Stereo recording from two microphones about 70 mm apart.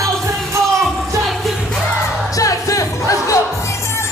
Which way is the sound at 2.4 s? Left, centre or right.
Left.